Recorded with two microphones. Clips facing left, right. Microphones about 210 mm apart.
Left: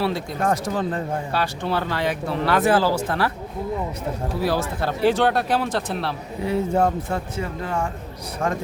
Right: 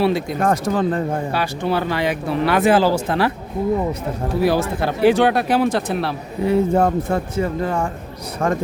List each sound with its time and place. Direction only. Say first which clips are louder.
0.0 s speech: right 6 dB; 15° right (ahead or behind)
0.3 s speech: right 4 dB; 55° right (ahead or behind)
1.3 s speech: right 3 dB; 10° right (ahead or behind)
4.4 s speech: right 6 dB; 15° right (ahead or behind)
6.4 s speech: right 4 dB; 55° right (ahead or behind)